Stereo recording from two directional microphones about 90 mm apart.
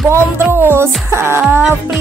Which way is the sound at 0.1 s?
25° right (ahead or behind).